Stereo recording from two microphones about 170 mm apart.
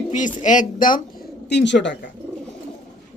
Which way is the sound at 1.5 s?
90° left.